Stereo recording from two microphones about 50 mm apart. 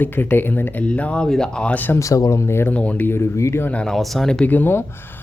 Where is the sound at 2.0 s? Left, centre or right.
Left.